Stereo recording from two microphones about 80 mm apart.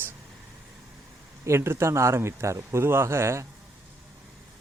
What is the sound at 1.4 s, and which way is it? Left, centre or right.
Speech, right.